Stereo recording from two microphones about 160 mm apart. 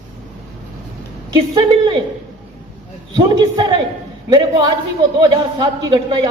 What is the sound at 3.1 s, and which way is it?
Speech, 25° right (ahead or behind).